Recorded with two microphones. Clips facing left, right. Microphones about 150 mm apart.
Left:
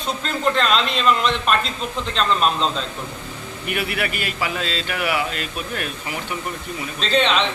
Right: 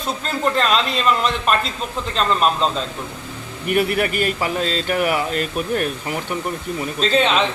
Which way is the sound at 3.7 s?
40° right (ahead or behind).